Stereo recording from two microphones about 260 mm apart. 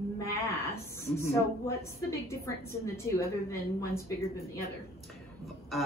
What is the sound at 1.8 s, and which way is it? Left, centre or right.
A woman's voice, centre.